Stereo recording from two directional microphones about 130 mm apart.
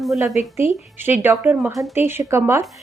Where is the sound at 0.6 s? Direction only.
15° right (ahead or behind).